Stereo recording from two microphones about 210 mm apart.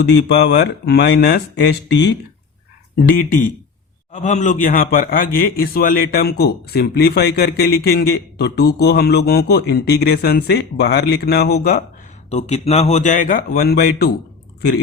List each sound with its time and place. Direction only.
0.0 s a man's voice: 55° left (ahead or behind)
2.9 s a man's voice: 40° left (ahead or behind)
12.3 s speech: 30° left (ahead or behind)